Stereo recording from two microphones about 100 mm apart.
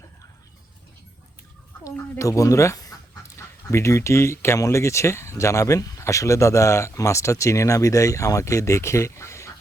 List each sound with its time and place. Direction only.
1.8 s speech: 30° left (ahead or behind)